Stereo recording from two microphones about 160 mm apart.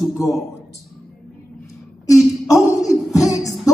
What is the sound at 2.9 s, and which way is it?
Music, 20° left (ahead or behind).